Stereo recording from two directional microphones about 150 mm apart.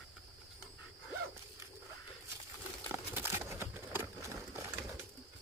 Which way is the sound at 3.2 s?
15° right (ahead or behind).